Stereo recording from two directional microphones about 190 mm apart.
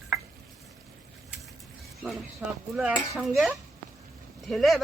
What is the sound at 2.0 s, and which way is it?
Speech, 5° right (ahead or behind).